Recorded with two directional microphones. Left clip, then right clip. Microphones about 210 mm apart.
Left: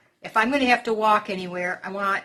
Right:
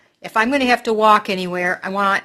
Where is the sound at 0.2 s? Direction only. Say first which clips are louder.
Right 4 dB; 45° right (ahead or behind).